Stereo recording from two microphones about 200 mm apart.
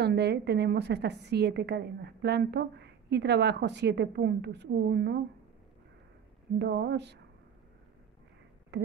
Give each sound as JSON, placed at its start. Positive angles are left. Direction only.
{"t": 0.0, "sound": "a woman's voice", "side_deg": -55}
{"t": 6.6, "sound": "a woman's voice", "side_deg": -60}
{"t": 8.7, "sound": "speech", "side_deg": -60}